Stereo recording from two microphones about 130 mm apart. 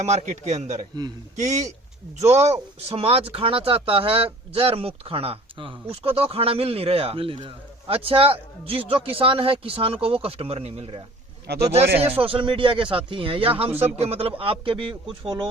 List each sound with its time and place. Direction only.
0.0 s a man's voice: 60° right (ahead or behind); by 15.4 s 35° right (ahead or behind)